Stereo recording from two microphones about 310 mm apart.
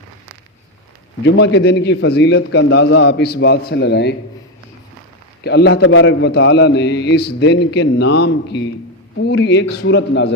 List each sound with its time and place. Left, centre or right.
1.2 s a man's voice: left
5.4 s a man's voice: left